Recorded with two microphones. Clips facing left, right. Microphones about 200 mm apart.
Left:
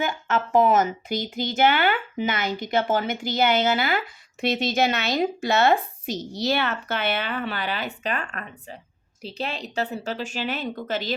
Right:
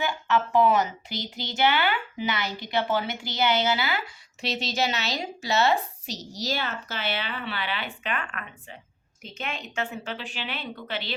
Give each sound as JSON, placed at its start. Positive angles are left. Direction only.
{"t": 0.0, "sound": "a woman's voice", "side_deg": 45}